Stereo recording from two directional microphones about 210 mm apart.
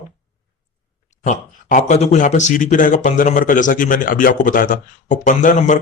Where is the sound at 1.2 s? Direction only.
35° left (ahead or behind).